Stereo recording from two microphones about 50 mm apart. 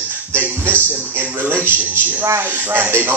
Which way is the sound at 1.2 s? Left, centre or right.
Right.